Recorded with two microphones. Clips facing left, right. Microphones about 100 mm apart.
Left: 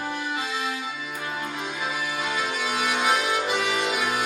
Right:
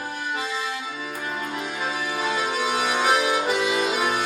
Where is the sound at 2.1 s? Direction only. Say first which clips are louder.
Right 6 dB; 25° right (ahead or behind).